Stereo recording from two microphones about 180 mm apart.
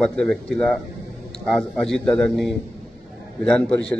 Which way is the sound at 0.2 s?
5° left (ahead or behind).